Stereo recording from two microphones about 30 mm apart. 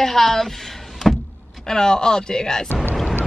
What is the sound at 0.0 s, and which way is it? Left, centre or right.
Speech, centre.